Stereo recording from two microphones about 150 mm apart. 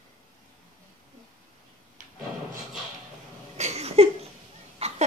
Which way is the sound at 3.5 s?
45° right (ahead or behind).